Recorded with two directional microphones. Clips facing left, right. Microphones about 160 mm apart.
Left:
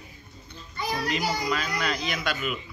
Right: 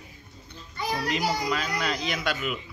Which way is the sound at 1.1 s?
30° right (ahead or behind).